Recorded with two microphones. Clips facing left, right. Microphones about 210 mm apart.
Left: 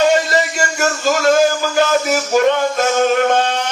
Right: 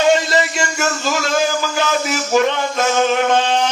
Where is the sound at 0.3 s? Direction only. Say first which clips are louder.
Left 1 dB; 45° left (ahead or behind).